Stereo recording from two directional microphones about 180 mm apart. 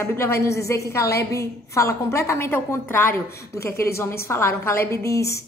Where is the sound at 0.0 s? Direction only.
15° left (ahead or behind).